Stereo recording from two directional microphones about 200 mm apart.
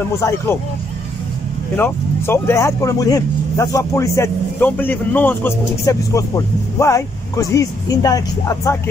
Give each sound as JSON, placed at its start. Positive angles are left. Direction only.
{"t": 0.1, "sound": "speech", "side_deg": 15}
{"t": 1.8, "sound": "speech", "side_deg": 10}